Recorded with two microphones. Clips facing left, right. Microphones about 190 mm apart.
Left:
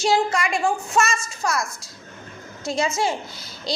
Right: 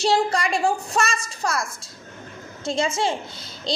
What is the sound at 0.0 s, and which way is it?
Speech, 35° right (ahead or behind).